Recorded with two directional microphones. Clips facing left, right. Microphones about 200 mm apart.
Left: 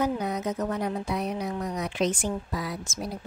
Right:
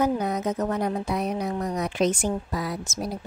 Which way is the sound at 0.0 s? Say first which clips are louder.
Right 3 dB; 45° right (ahead or behind).